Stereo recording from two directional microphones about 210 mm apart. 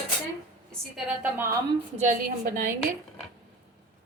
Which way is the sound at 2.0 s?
35° right (ahead or behind).